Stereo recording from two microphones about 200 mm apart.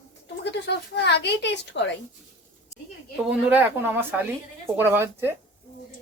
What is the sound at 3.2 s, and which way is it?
Speech, 10° right (ahead or behind).